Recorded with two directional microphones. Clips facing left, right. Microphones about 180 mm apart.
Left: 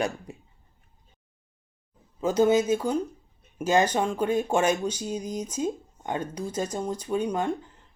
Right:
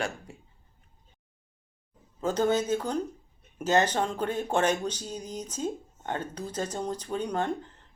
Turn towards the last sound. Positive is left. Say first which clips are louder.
# left 3 dB
turn(degrees=10)  # may be behind; listen again after turning